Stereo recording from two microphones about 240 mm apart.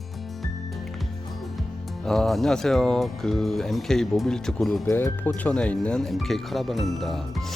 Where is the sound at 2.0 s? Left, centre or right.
Centre.